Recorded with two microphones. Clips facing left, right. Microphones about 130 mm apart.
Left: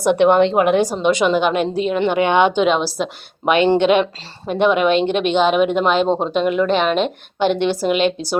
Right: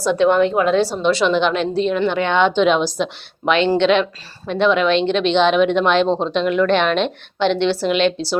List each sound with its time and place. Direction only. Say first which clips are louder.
0.3 s a woman's voice: left 1 dB; 20° left (ahead or behind); by 6.1 s 5° left (ahead or behind)
6.1 s speech: left 1 dB; 20° left (ahead or behind)
6.3 s a woman's voice: right 2 dB; 10° left (ahead or behind)